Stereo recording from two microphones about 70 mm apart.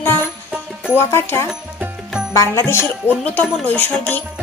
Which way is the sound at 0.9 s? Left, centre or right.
Left.